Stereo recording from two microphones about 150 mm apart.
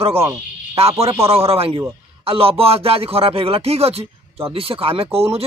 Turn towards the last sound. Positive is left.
turn(degrees=-40)  # may be behind; listen again after turning